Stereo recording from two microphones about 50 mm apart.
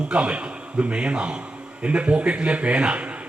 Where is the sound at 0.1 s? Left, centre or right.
Right.